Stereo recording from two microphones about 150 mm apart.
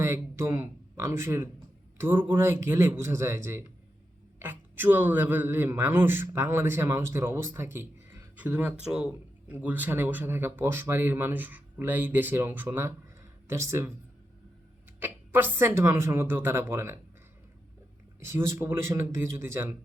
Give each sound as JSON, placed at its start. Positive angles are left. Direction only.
{"t": 0.0, "sound": "a man's voice", "side_deg": -15}
{"t": 14.9, "sound": "a man's voice", "side_deg": -15}
{"t": 18.2, "sound": "a man's voice", "side_deg": -15}